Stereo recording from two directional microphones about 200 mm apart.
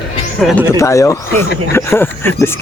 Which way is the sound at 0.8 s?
15° left (ahead or behind).